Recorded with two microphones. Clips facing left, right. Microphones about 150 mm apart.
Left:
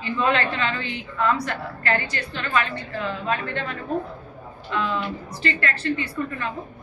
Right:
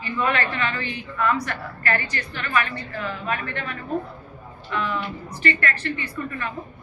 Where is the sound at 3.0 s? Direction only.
25° left (ahead or behind).